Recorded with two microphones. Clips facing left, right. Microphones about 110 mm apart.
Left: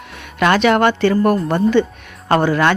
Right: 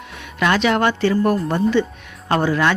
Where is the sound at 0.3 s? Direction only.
55° left (ahead or behind).